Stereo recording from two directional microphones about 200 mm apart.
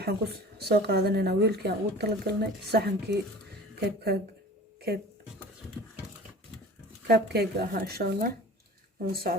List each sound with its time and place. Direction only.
0.0 s a woman's voice: 55° right (ahead or behind)
7.1 s a woman's voice: 50° right (ahead or behind)